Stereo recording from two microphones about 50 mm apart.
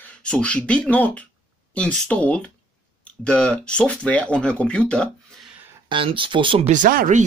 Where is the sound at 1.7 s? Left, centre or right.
Centre.